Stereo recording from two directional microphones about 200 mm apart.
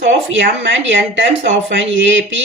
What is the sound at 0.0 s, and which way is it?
Speech, 65° right (ahead or behind).